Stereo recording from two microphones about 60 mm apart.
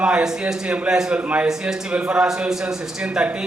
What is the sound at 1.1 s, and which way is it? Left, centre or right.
A man's voice, right.